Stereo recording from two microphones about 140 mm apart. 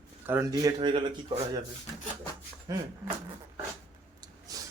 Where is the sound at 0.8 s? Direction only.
40° right (ahead or behind).